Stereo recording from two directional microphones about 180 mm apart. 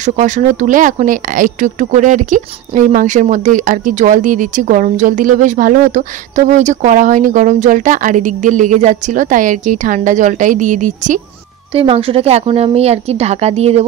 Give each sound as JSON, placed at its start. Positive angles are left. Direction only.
{"t": 0.0, "sound": "speech", "side_deg": -45}
{"t": 11.7, "sound": "a woman's voice", "side_deg": -30}